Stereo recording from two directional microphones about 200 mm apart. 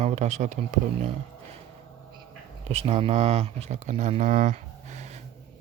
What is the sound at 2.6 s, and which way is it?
Speech, 30° right (ahead or behind).